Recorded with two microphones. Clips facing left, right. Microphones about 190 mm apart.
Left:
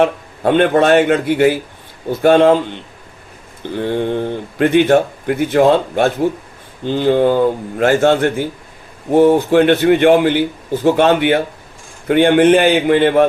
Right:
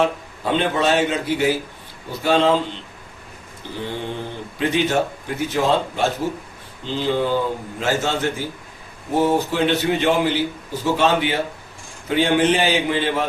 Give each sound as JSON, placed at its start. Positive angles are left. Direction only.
{"t": 0.4, "sound": "speech", "side_deg": 55}
{"t": 3.8, "sound": "speech", "side_deg": 60}